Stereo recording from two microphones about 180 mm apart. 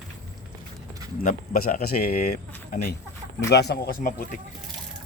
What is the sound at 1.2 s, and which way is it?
Speech, 50° left (ahead or behind).